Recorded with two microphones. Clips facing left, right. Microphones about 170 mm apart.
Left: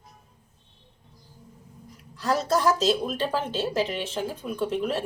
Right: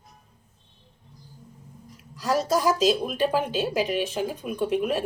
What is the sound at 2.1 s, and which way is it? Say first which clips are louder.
A woman's voice: right 1 dB; 10° right (ahead or behind).